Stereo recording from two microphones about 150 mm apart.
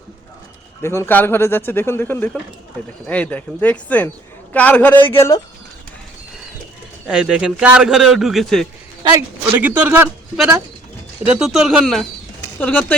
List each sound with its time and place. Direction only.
0.8 s speech: 15° left (ahead or behind)
7.1 s a man's voice: 5° right (ahead or behind)
9.6 s a man's voice: 10° right (ahead or behind)
11.3 s a man's voice: 5° right (ahead or behind)
12.5 s speech: 10° left (ahead or behind)